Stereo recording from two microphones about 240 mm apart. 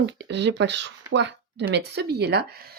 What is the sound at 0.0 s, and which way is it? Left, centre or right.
Speech, right.